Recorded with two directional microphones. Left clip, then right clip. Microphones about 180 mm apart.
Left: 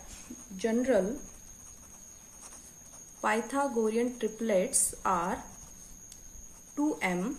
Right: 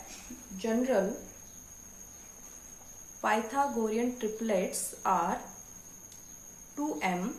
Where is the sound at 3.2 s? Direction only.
40° left (ahead or behind).